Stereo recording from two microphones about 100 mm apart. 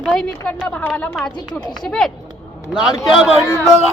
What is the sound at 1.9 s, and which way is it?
Speech, 5° left (ahead or behind).